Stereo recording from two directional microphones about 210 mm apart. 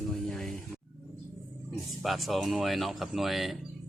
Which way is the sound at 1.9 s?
Centre (ahead or behind).